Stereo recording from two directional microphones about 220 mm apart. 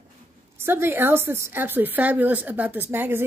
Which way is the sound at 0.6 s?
10° right (ahead or behind).